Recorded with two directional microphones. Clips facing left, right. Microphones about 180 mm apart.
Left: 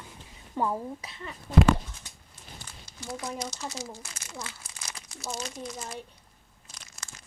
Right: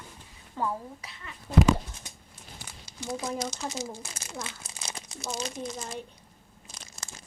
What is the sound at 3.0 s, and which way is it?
Speech, 20° right (ahead or behind).